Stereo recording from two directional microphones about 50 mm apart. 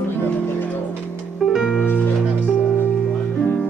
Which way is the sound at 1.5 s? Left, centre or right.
Centre.